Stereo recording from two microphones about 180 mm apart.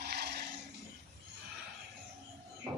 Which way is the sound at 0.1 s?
65° right (ahead or behind).